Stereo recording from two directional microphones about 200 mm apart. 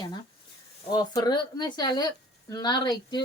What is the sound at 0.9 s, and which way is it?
Speech, 20° left (ahead or behind).